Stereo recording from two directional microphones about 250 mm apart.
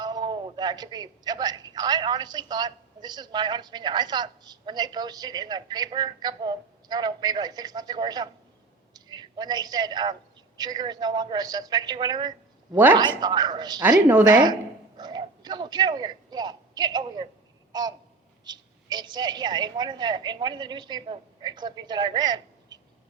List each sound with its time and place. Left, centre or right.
0.0 s a woman's voice: centre
17.7 s a sound: centre
18.4 s speech: centre